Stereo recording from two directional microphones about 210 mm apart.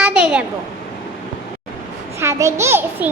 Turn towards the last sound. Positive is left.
turn(degrees=-10)  # may be behind; listen again after turning